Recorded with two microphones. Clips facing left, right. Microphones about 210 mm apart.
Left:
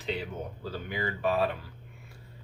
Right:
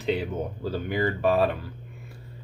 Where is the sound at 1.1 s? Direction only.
45° right (ahead or behind).